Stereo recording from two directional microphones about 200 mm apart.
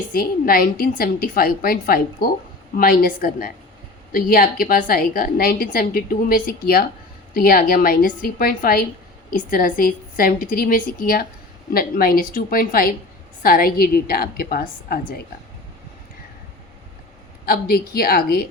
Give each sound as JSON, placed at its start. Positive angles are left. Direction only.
{"t": 0.1, "sound": "a woman's voice", "side_deg": 45}
{"t": 17.4, "sound": "a woman's voice", "side_deg": 50}